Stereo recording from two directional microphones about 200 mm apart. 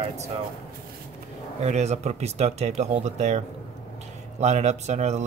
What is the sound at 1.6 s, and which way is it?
Speech, 35° right (ahead or behind).